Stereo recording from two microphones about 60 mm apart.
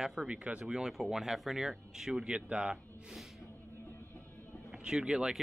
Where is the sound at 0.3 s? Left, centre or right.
Centre.